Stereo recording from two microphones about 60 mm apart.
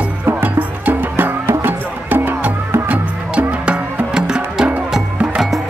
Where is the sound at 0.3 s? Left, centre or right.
Right.